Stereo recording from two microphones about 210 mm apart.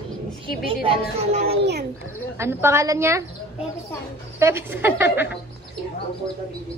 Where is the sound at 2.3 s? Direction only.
10° right (ahead or behind).